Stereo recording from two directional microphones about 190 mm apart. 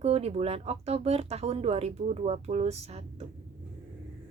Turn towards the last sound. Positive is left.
turn(degrees=-30)  # may be behind; listen again after turning